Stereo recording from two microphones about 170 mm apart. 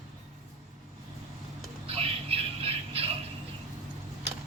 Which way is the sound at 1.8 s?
35° right (ahead or behind).